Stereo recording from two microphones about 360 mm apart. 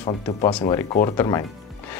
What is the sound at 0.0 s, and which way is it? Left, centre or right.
Speech, centre.